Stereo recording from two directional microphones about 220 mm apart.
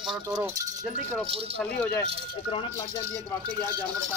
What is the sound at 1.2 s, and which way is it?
Speech, 25° right (ahead or behind).